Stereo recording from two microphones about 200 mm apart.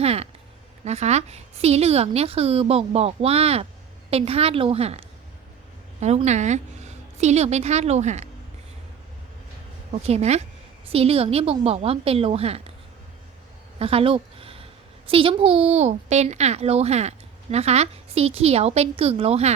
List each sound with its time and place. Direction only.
0.0 s a woman's voice: 30° right (ahead or behind)
10.0 s a woman's voice: 30° right (ahead or behind)
13.7 s a sound: 30° right (ahead or behind)
15.1 s speech: 25° right (ahead or behind)